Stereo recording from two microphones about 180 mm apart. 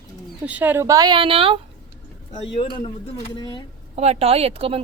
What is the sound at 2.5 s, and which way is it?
Speech, 25° left (ahead or behind).